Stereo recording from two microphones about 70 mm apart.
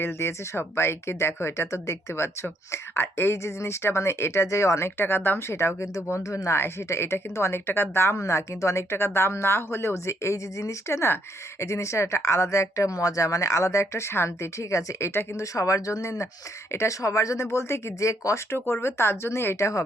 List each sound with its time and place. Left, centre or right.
0.0 s speech: left
4.9 s speech: left
5.5 s speech: left
8.1 s speech: left
18.5 s speech: left